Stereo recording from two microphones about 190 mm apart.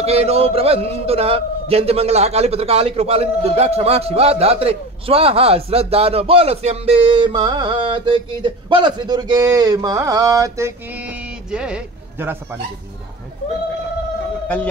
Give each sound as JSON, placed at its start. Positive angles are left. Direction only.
{"t": 0.0, "sound": "a man's voice", "side_deg": -35}
{"t": 11.1, "sound": "speech", "side_deg": -5}